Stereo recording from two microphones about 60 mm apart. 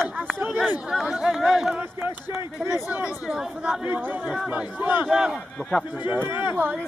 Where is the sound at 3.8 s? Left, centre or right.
Right.